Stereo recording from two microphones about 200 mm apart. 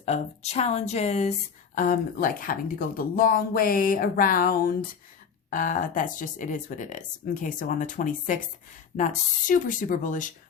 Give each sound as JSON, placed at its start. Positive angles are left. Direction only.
{"t": 0.0, "sound": "speech", "side_deg": 35}